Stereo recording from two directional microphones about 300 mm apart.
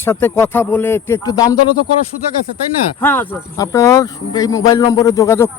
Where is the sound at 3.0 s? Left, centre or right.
Centre.